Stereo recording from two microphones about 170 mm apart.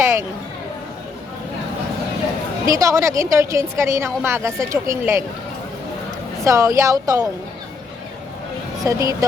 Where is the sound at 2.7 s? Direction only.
20° right (ahead or behind).